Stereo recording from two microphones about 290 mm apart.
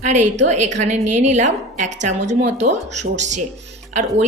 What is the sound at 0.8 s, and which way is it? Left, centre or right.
A woman's voice, right.